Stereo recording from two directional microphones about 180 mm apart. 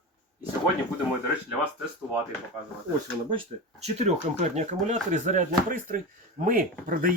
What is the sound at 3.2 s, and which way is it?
Speech, 35° right (ahead or behind).